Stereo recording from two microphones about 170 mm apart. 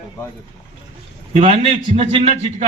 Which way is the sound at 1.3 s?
40° right (ahead or behind).